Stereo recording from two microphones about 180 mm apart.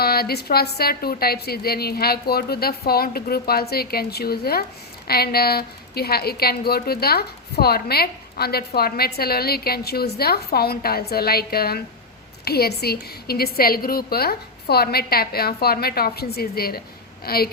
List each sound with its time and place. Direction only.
0.0 s a woman's voice: 60° left (ahead or behind)